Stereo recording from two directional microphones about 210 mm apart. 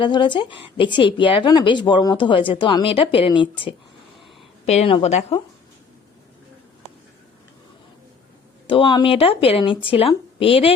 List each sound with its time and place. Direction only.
0.0 s a woman's voice: 20° left (ahead or behind)
8.6 s a woman's voice: 25° left (ahead or behind)